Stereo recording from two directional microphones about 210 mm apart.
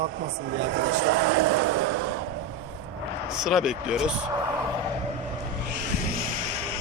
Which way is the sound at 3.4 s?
Centre (ahead or behind).